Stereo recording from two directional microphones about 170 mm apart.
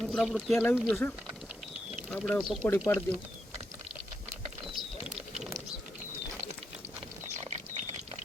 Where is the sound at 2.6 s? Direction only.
15° left (ahead or behind).